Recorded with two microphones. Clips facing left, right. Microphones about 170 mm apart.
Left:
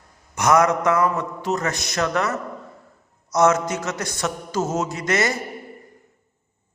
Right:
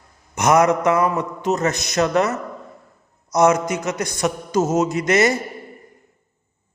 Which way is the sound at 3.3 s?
15° right (ahead or behind).